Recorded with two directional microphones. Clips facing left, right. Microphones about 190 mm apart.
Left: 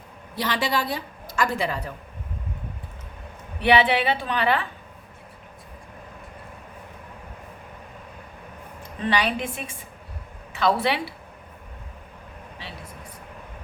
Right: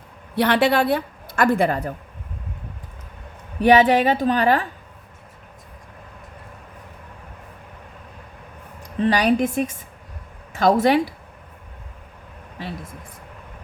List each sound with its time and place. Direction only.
0.3 s a woman's voice: 60° right (ahead or behind)
3.6 s a woman's voice: 45° right (ahead or behind)
8.8 s a woman's voice: 40° right (ahead or behind)